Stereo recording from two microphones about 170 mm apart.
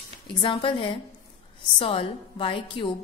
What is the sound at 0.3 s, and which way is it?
A woman's voice, 30° left (ahead or behind).